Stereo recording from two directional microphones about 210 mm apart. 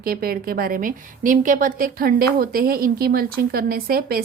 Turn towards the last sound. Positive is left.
turn(degrees=-45)  # may be behind; listen again after turning